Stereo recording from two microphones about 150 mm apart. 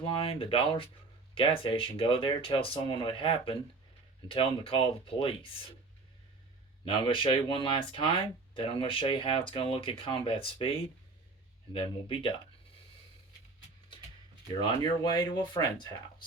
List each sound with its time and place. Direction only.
0.0 s speech: 40° left (ahead or behind)
6.8 s speech: 35° left (ahead or behind)
14.6 s speech: 30° left (ahead or behind)